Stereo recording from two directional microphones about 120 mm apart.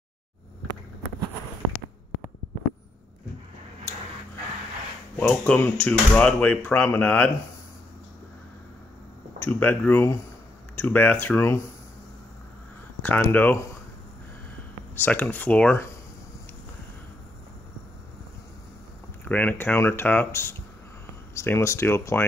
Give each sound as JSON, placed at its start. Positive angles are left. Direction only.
{"t": 5.1, "sound": "speech", "side_deg": 15}
{"t": 9.4, "sound": "speech", "side_deg": 15}
{"t": 13.0, "sound": "speech", "side_deg": 15}
{"t": 15.0, "sound": "speech", "side_deg": 15}
{"t": 19.2, "sound": "speech", "side_deg": 15}